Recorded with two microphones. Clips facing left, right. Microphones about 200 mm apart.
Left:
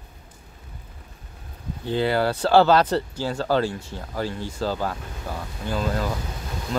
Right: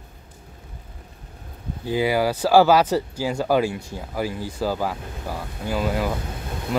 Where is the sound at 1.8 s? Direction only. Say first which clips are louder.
Right 1 dB; 10° right (ahead or behind).